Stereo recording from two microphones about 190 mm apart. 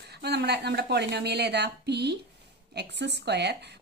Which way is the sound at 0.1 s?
60° right (ahead or behind).